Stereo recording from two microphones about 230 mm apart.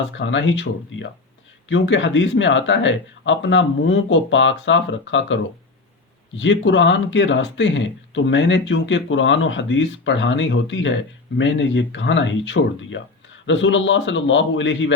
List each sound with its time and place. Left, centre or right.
0.2 s speech: left